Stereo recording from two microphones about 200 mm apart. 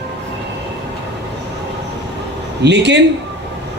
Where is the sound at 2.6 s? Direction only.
60° right (ahead or behind).